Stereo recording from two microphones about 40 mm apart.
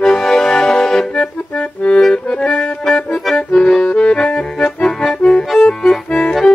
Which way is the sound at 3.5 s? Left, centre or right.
Centre.